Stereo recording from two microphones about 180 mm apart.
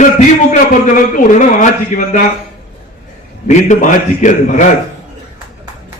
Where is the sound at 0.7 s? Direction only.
45° left (ahead or behind).